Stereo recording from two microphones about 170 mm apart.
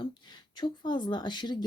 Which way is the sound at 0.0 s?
25° left (ahead or behind).